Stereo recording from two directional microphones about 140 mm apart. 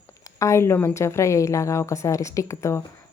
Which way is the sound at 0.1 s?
20° left (ahead or behind).